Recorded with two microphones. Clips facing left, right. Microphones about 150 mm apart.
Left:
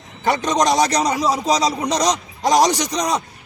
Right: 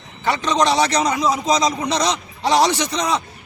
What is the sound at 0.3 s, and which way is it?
A man's voice, 45° left (ahead or behind).